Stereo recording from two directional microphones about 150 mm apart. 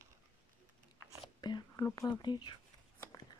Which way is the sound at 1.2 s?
30° left (ahead or behind).